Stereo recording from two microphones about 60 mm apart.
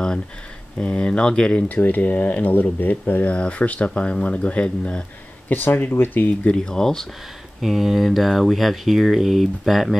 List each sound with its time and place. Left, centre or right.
0.7 s speech: centre
1.7 s speech: left
5.5 s speech: left
6.5 s speech: centre
7.6 s speech: centre